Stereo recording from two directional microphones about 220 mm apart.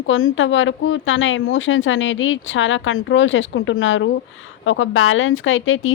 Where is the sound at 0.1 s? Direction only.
65° left (ahead or behind).